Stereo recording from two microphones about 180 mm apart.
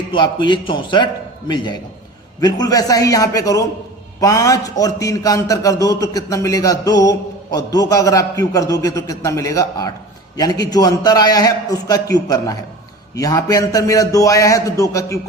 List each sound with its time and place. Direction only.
0.1 s a man's voice: 25° left (ahead or behind)